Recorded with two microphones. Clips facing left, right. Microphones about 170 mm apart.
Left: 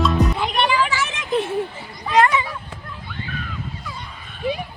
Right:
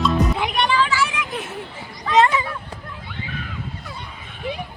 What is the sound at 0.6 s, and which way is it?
Vehicle, 15° left (ahead or behind).